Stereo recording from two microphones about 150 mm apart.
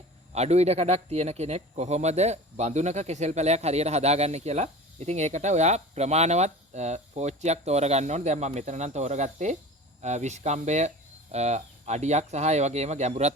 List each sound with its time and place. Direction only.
0.3 s speech: 45° right (ahead or behind)